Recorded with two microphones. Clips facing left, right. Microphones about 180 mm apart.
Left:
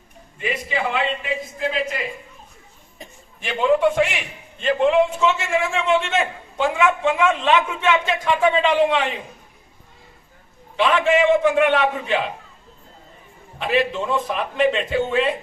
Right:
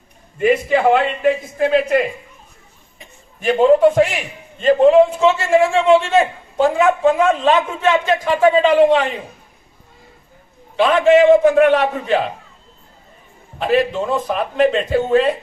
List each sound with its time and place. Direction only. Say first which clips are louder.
0.3 s a man's voice: right 11 dB; 50° right (ahead or behind)
3.4 s a man's voice: right 7 dB; 40° right (ahead or behind)
10.8 s a man's voice: right 6 dB; 40° right (ahead or behind)
13.6 s a man's voice: right 4 dB; 40° right (ahead or behind)